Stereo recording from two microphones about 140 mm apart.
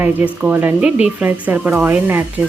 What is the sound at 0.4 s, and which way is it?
Speech, 10° right (ahead or behind).